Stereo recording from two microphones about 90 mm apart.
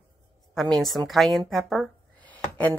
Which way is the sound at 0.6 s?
5° left (ahead or behind).